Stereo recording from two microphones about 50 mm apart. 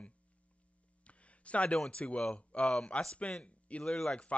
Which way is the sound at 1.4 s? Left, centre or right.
Left.